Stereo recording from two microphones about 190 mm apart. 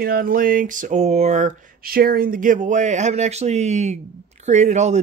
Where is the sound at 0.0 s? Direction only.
50° right (ahead or behind).